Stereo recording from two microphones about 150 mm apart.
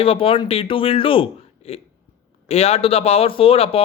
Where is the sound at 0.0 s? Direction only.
40° left (ahead or behind).